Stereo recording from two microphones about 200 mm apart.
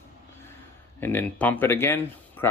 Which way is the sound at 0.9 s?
10° left (ahead or behind).